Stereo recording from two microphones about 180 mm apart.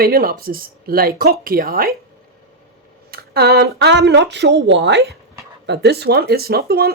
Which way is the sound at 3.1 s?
60° right (ahead or behind).